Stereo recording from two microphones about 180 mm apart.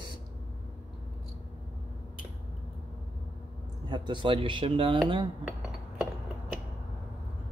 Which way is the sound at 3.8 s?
25° right (ahead or behind).